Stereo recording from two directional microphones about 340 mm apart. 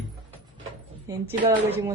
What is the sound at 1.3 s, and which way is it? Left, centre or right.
Speech, centre.